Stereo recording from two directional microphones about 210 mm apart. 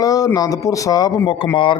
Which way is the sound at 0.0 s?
15° left (ahead or behind).